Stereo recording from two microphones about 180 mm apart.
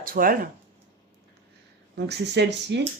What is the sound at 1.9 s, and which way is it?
Speech, 70° right (ahead or behind).